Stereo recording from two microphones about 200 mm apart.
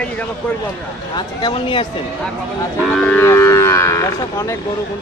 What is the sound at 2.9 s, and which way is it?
Livestock, 5° left (ahead or behind).